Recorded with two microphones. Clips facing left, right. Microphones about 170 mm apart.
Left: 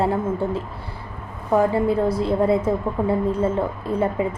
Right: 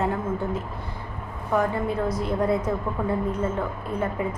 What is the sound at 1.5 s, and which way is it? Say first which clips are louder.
A woman's voice: left 6 dB; 30° left (ahead or behind).